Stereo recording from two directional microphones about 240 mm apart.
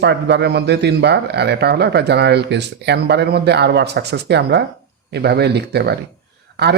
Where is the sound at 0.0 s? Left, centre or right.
Right.